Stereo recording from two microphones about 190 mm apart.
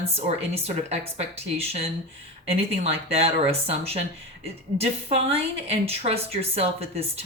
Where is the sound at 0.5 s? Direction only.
30° right (ahead or behind).